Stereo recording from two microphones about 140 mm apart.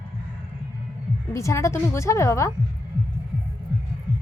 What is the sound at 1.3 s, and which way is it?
A woman's voice, 20° left (ahead or behind).